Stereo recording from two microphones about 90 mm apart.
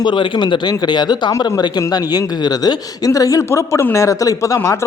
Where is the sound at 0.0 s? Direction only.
60° left (ahead or behind).